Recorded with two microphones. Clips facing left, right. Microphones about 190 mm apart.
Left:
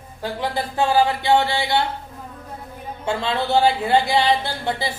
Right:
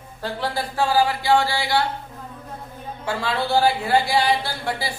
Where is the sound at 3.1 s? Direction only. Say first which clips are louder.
Left 2 dB; 20° left (ahead or behind).